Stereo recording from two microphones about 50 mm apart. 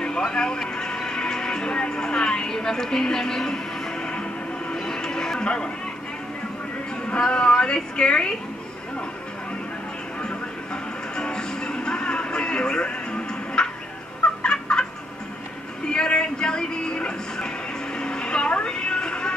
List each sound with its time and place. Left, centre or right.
0.0 s music: centre
7.1 s a woman's voice: centre
10.2 s music: centre
14.4 s fowl: centre
15.9 s speech: centre
17.9 s vehicle: centre